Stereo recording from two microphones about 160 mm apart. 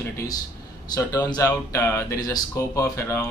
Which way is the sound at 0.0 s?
20° left (ahead or behind).